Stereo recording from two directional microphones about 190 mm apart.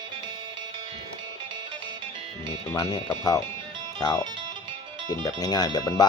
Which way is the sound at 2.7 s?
20° left (ahead or behind).